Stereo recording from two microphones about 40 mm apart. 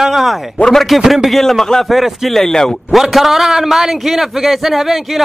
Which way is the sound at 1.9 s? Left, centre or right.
Centre.